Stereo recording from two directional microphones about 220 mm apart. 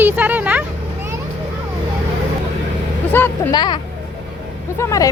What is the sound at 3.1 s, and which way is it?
Speech, 15° left (ahead or behind).